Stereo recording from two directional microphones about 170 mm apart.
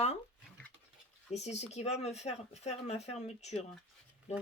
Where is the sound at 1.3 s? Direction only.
40° left (ahead or behind).